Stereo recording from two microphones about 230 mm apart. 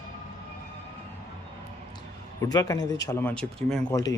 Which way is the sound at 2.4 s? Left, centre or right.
Centre.